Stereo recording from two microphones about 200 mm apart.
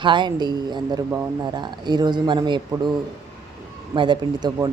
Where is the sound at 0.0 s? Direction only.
25° right (ahead or behind).